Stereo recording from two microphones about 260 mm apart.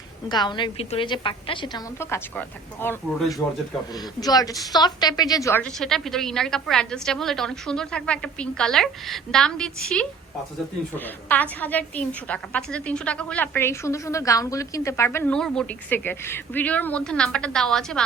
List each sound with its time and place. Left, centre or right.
0.3 s a woman's voice: centre